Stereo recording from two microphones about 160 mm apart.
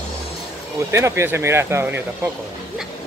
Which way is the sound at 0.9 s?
15° right (ahead or behind).